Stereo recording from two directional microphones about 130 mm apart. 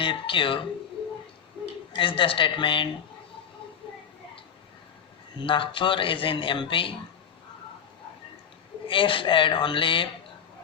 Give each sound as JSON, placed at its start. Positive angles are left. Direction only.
{"t": 0.0, "sound": "speech", "side_deg": 40}
{"t": 1.9, "sound": "a man's voice", "side_deg": 40}
{"t": 5.4, "sound": "a man's voice", "side_deg": 40}
{"t": 8.9, "sound": "a man's voice", "side_deg": 40}